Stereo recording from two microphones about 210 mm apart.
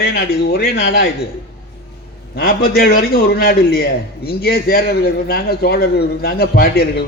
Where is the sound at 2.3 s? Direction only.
50° left (ahead or behind).